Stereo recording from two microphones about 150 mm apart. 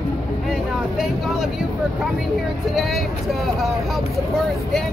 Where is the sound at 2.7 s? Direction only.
Centre (ahead or behind).